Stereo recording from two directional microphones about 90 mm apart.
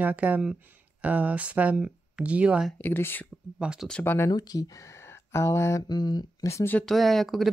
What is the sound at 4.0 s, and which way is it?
Mantra, 25° left (ahead or behind).